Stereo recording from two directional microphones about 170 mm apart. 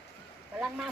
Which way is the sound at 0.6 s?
Centre (ahead or behind).